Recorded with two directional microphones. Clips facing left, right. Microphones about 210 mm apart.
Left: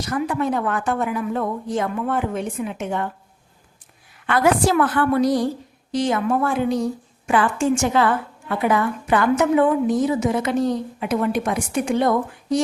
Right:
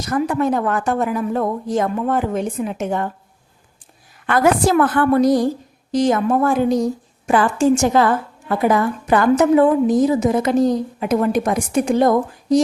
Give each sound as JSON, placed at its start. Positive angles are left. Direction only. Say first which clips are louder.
{"t": 0.0, "sound": "a woman's voice", "louder": "right 4 dB", "side_deg": -45}
{"t": 4.3, "sound": "a woman's voice", "louder": "right 2 dB", "side_deg": -45}